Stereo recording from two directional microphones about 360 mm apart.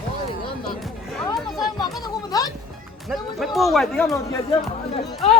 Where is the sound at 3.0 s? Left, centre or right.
Centre.